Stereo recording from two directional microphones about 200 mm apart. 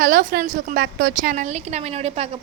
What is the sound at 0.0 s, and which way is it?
A woman's voice, 45° right (ahead or behind).